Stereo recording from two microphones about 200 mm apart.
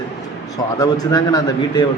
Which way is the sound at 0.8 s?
20° left (ahead or behind).